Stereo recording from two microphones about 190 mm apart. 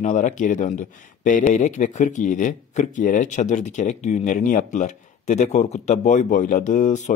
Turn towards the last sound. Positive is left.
turn(degrees=40)  # may be behind; listen again after turning